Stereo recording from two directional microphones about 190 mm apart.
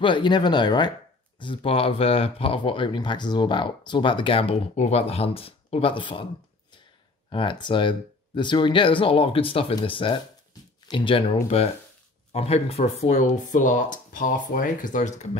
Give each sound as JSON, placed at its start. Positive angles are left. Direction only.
{"t": 0.0, "sound": "speech", "side_deg": 25}
{"t": 7.2, "sound": "speech", "side_deg": 25}